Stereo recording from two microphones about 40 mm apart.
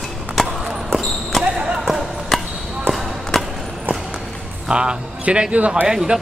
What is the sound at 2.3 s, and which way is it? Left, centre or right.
Basketball bounce, centre.